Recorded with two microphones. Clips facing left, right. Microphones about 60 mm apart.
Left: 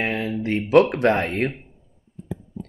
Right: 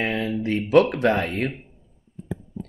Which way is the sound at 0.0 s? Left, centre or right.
Left.